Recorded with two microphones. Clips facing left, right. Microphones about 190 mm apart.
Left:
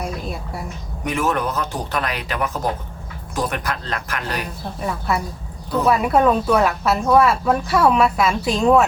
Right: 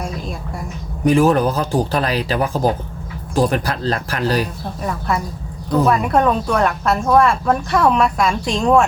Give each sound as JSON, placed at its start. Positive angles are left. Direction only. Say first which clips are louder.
{"t": 0.0, "sound": "a sound", "louder": "right 1 dB", "side_deg": 5}
{"t": 1.0, "sound": "speech", "louder": "right 8 dB", "side_deg": -30}
{"t": 4.9, "sound": "speech", "louder": "right 1 dB", "side_deg": 5}